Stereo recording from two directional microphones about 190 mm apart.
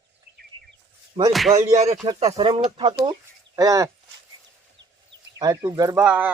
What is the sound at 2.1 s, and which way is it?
A man's voice, 30° right (ahead or behind).